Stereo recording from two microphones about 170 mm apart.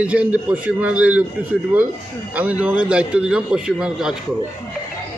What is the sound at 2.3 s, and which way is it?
Speech, 10° right (ahead or behind).